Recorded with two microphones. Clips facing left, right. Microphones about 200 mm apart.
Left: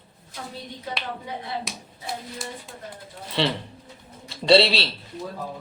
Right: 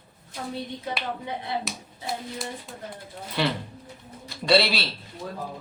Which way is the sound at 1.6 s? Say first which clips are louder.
Right 2 dB; centre (ahead or behind).